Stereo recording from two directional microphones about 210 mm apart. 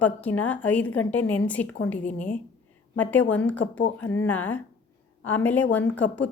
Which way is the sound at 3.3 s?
5° left (ahead or behind).